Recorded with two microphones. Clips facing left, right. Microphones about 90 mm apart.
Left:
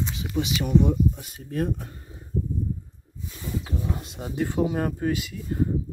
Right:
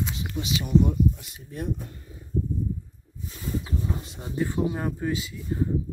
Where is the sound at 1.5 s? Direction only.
90° left.